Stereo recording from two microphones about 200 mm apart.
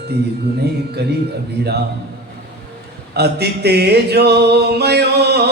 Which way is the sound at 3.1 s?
55° right (ahead or behind).